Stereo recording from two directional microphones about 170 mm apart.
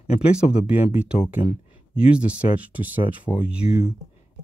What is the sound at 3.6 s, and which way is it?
Speech, 45° left (ahead or behind).